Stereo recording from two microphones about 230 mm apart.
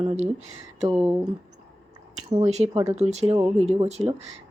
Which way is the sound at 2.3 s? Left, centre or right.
Right.